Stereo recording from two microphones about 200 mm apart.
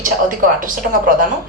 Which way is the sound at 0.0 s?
45° right (ahead or behind).